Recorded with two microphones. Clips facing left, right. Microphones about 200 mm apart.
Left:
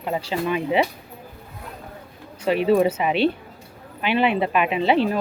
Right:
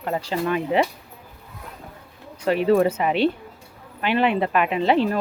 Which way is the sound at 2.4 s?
15° left (ahead or behind).